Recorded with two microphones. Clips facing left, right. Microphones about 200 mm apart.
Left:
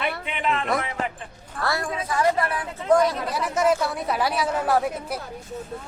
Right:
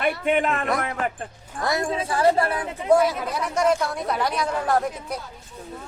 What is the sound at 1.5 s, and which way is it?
A woman's voice, 20° right (ahead or behind).